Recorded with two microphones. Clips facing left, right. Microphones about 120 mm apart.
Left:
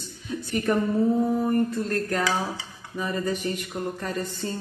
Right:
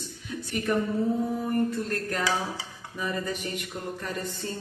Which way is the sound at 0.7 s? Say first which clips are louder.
Left 2 dB; 50° left (ahead or behind).